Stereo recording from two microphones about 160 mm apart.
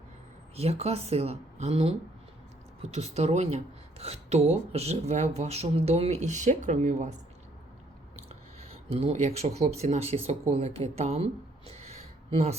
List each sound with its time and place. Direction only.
0.5 s speech: 40° right (ahead or behind)
8.3 s a sound: 40° right (ahead or behind)
9.8 s speech: 40° right (ahead or behind)